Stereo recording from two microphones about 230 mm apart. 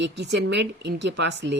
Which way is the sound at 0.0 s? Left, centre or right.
Right.